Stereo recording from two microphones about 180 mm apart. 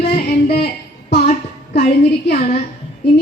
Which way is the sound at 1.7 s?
65° left (ahead or behind).